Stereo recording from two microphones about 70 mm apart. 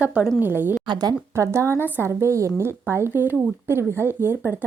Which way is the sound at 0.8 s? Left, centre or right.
Right.